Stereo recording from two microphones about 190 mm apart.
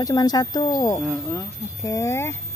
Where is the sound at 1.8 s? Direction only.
15° left (ahead or behind).